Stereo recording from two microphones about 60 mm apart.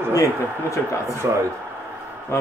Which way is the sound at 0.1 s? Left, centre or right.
Left.